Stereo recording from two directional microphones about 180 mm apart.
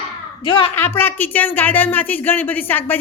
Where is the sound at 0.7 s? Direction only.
10° left (ahead or behind).